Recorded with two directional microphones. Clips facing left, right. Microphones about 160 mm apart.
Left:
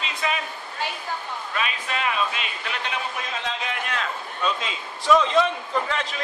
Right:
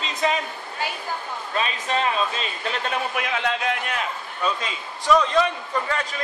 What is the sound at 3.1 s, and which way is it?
Speech, 65° right (ahead or behind).